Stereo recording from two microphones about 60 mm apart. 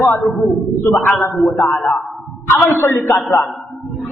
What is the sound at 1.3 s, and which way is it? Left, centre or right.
A woman's voice, left.